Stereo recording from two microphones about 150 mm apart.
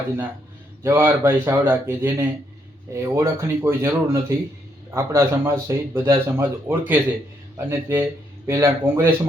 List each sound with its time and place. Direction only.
0.8 s speech: 15° right (ahead or behind)